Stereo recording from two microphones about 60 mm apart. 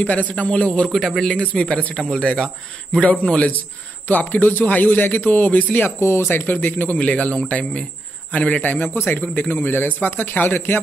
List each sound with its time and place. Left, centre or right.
0.0 s a man's voice: left
0.9 s a man's voice: centre
1.2 s a man's voice: centre
5.9 s speech: left
6.2 s a man's voice: left
8.9 s a man's voice: left